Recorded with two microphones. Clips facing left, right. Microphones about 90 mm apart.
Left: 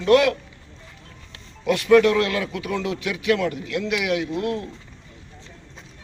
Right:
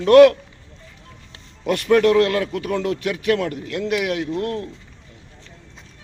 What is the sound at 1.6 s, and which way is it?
A man's voice, 45° right (ahead or behind).